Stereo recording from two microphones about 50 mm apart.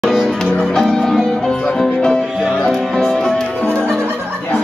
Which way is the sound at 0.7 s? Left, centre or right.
Centre.